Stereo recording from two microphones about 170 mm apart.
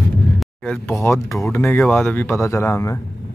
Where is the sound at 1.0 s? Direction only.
15° left (ahead or behind).